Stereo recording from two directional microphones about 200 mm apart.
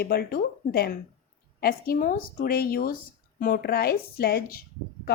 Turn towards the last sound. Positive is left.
turn(degrees=50)  # may be behind; listen again after turning